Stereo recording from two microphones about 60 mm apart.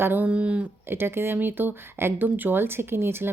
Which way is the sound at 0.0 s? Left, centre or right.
Right.